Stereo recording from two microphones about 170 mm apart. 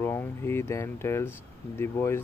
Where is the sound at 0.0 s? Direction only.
15° left (ahead or behind).